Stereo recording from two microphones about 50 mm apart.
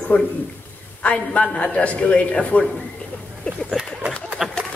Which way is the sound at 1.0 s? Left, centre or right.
Left.